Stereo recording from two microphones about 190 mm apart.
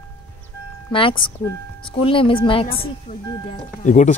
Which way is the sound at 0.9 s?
25° left (ahead or behind).